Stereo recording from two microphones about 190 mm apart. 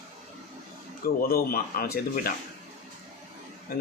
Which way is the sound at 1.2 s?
55° left (ahead or behind).